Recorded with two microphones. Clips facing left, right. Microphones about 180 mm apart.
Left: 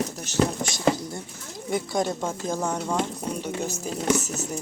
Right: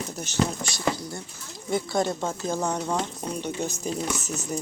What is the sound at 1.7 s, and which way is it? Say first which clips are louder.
Speech: even; 10° left (ahead or behind).